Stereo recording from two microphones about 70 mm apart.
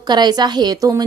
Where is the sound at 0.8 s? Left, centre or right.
Right.